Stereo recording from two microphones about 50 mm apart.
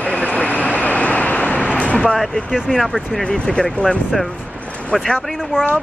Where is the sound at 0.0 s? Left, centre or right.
Left.